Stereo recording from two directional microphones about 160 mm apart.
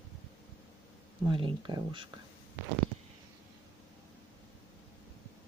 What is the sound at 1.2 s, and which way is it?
Speech, 30° right (ahead or behind).